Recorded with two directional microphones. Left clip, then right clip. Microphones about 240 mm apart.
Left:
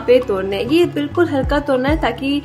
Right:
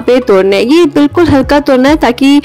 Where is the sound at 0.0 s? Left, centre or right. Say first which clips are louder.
Right 7 dB; right.